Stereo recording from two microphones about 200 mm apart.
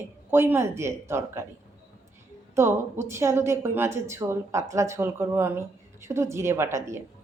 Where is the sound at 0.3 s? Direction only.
10° right (ahead or behind).